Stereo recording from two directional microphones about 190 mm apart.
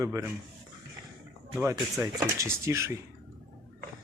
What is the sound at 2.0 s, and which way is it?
Speech, 15° right (ahead or behind).